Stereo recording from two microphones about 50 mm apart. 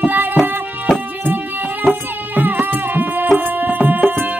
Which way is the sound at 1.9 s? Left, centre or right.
Right.